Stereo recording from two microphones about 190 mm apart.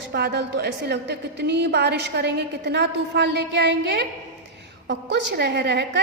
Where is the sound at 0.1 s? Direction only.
60° right (ahead or behind).